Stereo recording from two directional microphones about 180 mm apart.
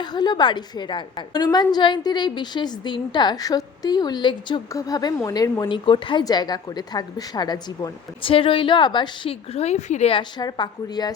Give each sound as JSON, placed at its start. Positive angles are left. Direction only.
{"t": 0.0, "sound": "a woman's voice", "side_deg": 25}